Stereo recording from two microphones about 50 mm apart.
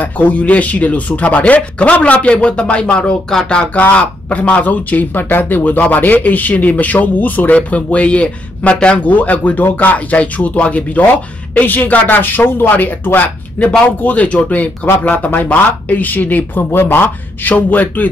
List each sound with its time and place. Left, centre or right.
0.0 s speech: left